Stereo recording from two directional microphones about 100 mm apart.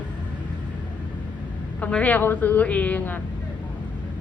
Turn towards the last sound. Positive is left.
turn(degrees=15)  # may be behind; listen again after turning